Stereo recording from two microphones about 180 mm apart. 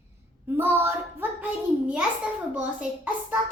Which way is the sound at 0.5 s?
10° right (ahead or behind).